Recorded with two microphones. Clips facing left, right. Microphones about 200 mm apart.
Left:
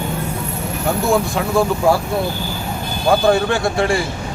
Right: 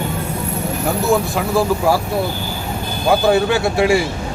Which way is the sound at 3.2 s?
5° right (ahead or behind).